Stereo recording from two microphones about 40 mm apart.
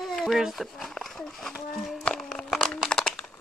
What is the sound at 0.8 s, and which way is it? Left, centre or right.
Speech, centre.